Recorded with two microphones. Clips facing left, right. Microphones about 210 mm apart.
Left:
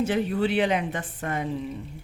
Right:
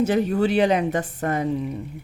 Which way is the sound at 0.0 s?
45° right (ahead or behind).